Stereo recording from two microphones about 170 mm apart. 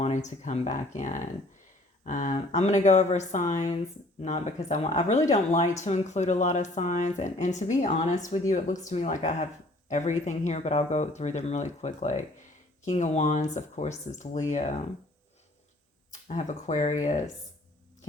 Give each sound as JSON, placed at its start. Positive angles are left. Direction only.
{"t": 0.0, "sound": "speech", "side_deg": 45}
{"t": 16.3, "sound": "speech", "side_deg": 45}